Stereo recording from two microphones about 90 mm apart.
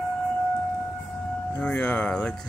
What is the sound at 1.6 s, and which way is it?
Speech, 20° left (ahead or behind).